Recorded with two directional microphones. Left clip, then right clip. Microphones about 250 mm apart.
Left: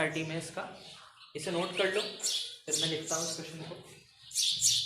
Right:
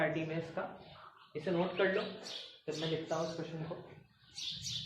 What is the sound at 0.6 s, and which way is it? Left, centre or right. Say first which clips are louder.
Speech: even; left.